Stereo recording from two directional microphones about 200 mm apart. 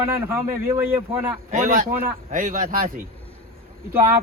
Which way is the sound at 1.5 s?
40° right (ahead or behind).